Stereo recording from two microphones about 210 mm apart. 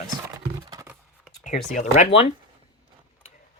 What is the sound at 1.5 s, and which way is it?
Speech, 35° left (ahead or behind).